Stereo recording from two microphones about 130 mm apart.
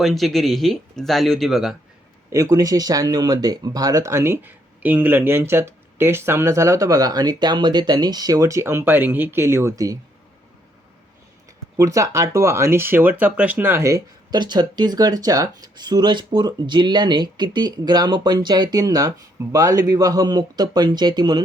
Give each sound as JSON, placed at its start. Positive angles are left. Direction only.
{"t": 0.0, "sound": "speech", "side_deg": 0}
{"t": 2.3, "sound": "speech", "side_deg": -25}
{"t": 11.8, "sound": "speech", "side_deg": -25}